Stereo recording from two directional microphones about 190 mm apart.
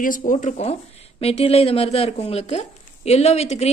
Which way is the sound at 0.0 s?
45° left (ahead or behind).